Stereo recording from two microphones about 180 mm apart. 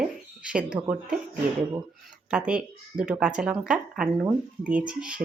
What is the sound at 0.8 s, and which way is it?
Speech, 25° right (ahead or behind).